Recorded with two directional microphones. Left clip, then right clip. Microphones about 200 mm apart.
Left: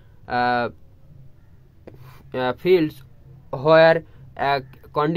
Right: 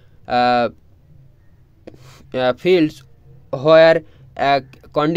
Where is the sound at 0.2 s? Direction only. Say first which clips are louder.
Right 5 dB; 45° right (ahead or behind).